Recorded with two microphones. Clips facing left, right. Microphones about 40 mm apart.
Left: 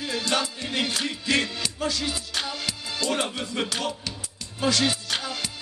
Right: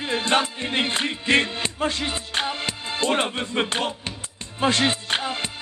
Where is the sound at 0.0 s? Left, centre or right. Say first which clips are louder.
Right 4 dB; right.